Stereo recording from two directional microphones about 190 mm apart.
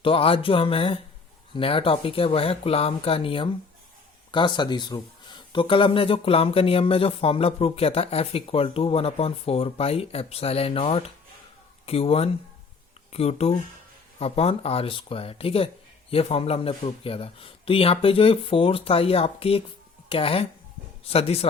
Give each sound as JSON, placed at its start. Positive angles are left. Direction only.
{"t": 0.0, "sound": "speech", "side_deg": 30}